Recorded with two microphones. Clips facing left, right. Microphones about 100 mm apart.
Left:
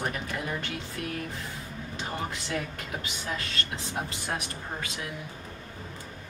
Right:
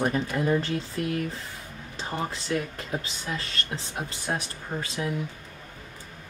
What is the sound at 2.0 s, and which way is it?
Speech, 30° right (ahead or behind).